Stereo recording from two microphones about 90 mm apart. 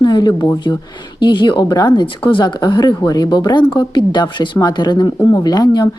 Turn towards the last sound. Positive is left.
turn(degrees=50)  # may be behind; listen again after turning